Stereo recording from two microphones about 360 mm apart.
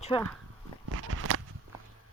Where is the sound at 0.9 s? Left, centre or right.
Right.